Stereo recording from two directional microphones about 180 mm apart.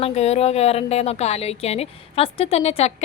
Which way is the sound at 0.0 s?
35° left (ahead or behind).